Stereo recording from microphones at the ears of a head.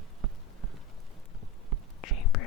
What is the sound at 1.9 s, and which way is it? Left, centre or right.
Whispering, left.